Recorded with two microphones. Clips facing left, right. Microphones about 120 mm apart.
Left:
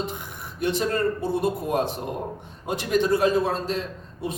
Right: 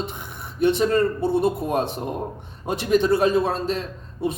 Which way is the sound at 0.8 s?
25° right (ahead or behind).